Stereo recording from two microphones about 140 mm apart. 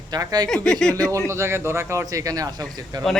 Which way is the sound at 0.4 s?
5° left (ahead or behind).